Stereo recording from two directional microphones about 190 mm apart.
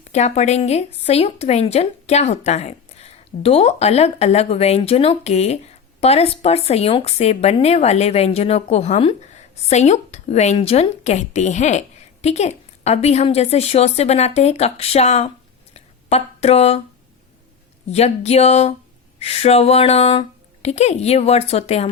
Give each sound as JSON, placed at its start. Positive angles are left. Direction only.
{"t": 0.1, "sound": "a woman's voice", "side_deg": 35}
{"t": 15.7, "sound": "a sound", "side_deg": 35}
{"t": 17.9, "sound": "a woman's voice", "side_deg": 35}